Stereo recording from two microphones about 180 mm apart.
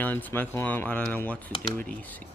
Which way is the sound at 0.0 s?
10° left (ahead or behind).